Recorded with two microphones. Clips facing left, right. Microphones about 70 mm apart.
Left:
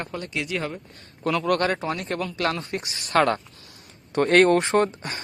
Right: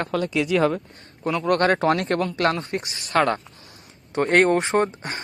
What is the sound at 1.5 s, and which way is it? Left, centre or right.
Speech, right.